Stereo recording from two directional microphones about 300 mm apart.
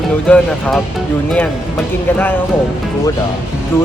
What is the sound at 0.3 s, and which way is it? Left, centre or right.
Speech, centre.